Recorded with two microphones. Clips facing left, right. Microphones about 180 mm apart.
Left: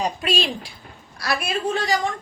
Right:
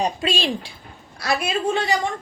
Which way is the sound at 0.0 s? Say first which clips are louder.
Right 1 dB; 25° right (ahead or behind).